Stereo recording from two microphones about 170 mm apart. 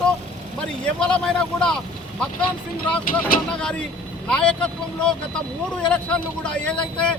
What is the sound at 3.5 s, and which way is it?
Speech, 5° left (ahead or behind).